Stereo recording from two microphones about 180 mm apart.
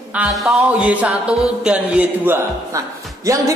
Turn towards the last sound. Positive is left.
turn(degrees=-20)  # may be behind; listen again after turning